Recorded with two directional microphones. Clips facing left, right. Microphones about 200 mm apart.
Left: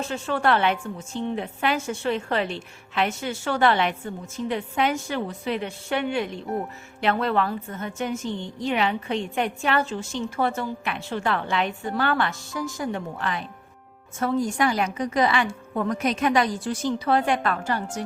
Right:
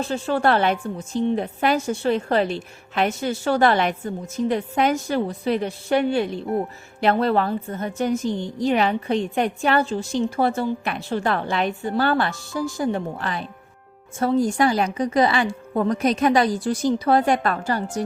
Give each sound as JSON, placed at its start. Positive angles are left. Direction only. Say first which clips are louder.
{"t": 0.1, "sound": "a woman's voice", "louder": "right 3 dB", "side_deg": -35}